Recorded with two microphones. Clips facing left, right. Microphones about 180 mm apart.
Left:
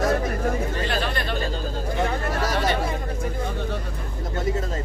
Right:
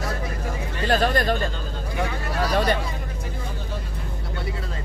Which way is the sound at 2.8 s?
50° left (ahead or behind).